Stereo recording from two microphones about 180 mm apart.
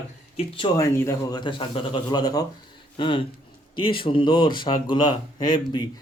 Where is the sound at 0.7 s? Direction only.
15° left (ahead or behind).